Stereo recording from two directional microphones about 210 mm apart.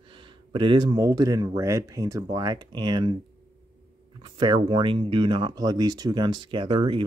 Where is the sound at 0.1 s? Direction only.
25° right (ahead or behind).